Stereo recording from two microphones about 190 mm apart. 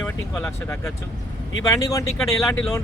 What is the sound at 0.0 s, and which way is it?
Speech, 10° left (ahead or behind).